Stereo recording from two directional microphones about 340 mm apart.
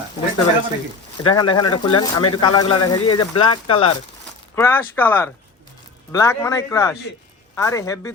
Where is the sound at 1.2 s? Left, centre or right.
Centre.